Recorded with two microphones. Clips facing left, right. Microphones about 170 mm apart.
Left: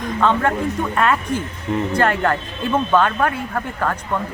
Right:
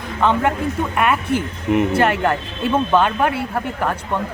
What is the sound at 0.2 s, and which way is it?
Speech, 15° right (ahead or behind).